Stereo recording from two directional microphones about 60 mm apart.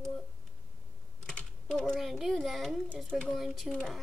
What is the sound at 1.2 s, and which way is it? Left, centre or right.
Typing, centre.